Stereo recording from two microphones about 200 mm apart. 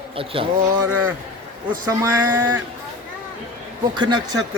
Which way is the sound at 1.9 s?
10° right (ahead or behind).